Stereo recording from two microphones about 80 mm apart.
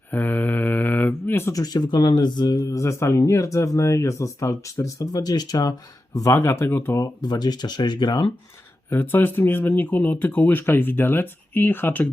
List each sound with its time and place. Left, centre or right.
0.1 s mantra: left
1.5 s speech: left
2.6 s speech: left
6.3 s speech: left
7.0 s speech: left
8.9 s speech: left